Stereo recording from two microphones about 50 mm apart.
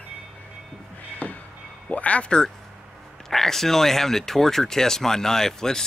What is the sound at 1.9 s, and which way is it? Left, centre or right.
Speech, left.